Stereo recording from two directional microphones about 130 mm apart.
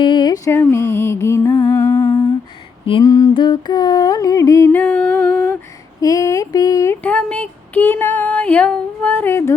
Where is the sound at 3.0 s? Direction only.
25° left (ahead or behind).